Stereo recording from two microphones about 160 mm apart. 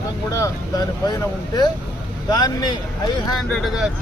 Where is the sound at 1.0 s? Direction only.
25° left (ahead or behind).